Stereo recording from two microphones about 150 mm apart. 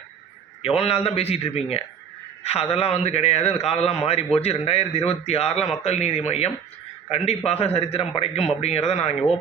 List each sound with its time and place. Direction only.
0.6 s a man's voice: 40° left (ahead or behind)